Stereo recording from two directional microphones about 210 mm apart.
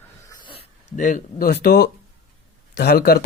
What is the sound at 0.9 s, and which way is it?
Speech, 35° left (ahead or behind).